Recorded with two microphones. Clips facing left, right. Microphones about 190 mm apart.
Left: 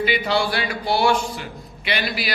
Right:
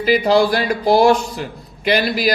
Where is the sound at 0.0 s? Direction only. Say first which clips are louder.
Right 7 dB; 40° right (ahead or behind).